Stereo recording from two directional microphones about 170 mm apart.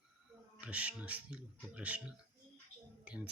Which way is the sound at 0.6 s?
10° right (ahead or behind).